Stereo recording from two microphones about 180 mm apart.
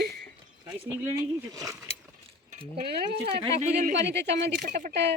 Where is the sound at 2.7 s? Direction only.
65° right (ahead or behind).